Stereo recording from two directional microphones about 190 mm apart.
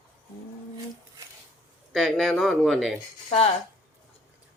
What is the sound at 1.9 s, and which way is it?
Speech, centre (ahead or behind).